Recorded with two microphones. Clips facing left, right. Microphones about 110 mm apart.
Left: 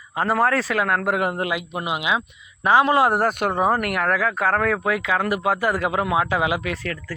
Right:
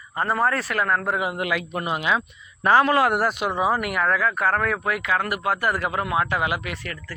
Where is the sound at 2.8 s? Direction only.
25° left (ahead or behind).